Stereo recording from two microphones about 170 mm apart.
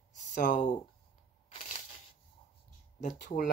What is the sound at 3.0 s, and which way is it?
Speech, 50° left (ahead or behind).